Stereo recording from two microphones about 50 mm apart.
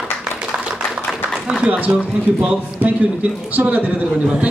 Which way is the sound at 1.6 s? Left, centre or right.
Right.